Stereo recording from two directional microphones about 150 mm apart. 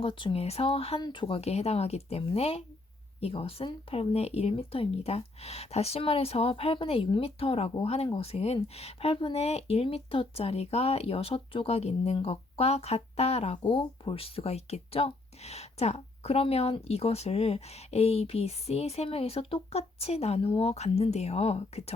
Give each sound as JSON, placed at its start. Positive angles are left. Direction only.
{"t": 0.0, "sound": "speech", "side_deg": 35}
{"t": 13.7, "sound": "speech", "side_deg": 35}